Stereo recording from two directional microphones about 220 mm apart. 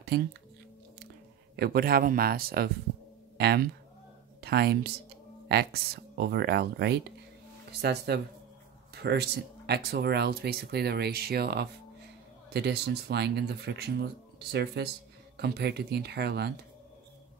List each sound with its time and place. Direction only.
0.0 s speech: 45° right (ahead or behind)
1.6 s speech: 45° right (ahead or behind)